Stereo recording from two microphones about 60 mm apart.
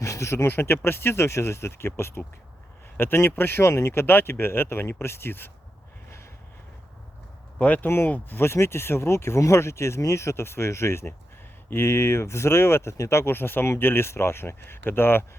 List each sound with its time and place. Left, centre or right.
0.0 s a sound: left
0.4 s speech: left
7.6 s speech: left
7.9 s speech: left